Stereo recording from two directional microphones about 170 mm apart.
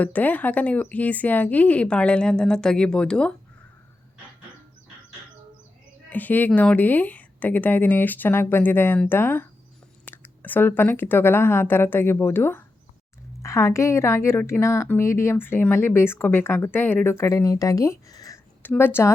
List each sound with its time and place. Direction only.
0.0 s a woman's voice: 10° left (ahead or behind)
6.1 s a woman's voice: 10° left (ahead or behind)